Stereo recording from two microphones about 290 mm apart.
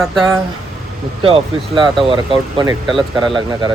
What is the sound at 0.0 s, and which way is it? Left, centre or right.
Speech, centre.